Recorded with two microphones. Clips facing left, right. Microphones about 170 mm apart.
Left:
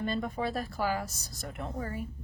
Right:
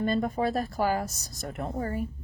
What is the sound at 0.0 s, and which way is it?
A woman's voice, 45° right (ahead or behind).